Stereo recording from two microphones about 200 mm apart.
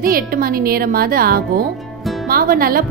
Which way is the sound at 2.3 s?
45° right (ahead or behind).